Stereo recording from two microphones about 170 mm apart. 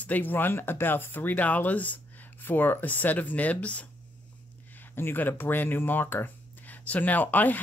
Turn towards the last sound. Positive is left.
turn(degrees=10)  # may be behind; listen again after turning